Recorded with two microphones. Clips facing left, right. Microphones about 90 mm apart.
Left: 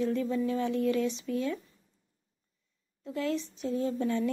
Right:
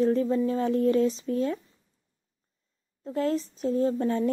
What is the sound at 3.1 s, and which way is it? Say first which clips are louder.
Speech: right 5 dB; 40° right (ahead or behind).